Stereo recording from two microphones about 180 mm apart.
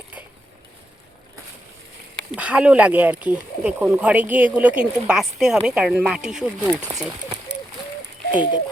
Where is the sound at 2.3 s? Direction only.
5° right (ahead or behind).